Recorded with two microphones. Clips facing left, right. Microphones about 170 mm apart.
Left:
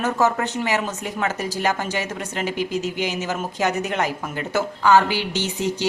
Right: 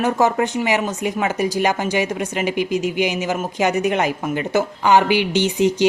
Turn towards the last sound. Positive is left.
turn(degrees=-15)  # may be behind; listen again after turning